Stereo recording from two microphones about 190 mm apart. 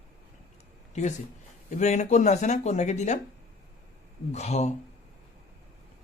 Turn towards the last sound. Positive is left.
turn(degrees=35)  # may be behind; listen again after turning